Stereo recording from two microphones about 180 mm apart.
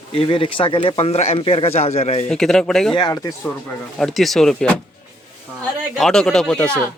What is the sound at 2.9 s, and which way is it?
Speech, 25° left (ahead or behind).